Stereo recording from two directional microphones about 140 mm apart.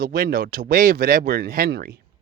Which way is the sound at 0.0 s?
90° right.